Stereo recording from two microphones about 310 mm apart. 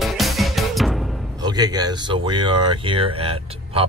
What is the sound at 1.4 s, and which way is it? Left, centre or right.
Speech, centre.